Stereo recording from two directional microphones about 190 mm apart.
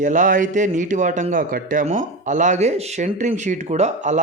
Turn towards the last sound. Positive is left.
turn(degrees=-40)  # may be behind; listen again after turning